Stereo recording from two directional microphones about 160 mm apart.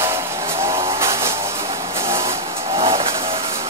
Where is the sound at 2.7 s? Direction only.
35° right (ahead or behind).